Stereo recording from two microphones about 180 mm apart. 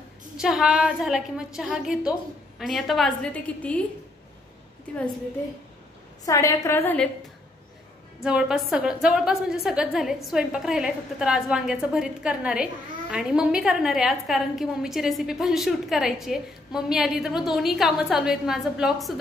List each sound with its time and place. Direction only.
0.4 s a woman's voice: 5° right (ahead or behind)
6.2 s a woman's voice: 15° left (ahead or behind)
8.2 s a woman's voice: 5° right (ahead or behind)